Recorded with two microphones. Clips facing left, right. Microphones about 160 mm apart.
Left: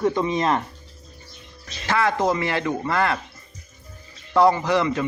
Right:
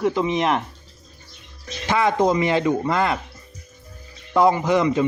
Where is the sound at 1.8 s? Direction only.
20° right (ahead or behind).